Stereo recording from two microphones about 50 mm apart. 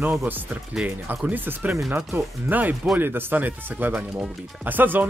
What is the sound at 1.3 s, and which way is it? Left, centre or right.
Speech, right.